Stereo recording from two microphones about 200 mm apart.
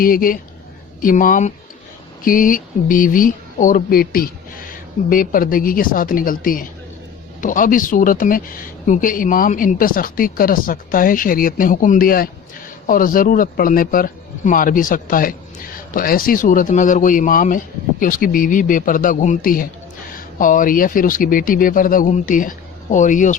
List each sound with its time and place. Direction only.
0.0 s speech: 45° left (ahead or behind)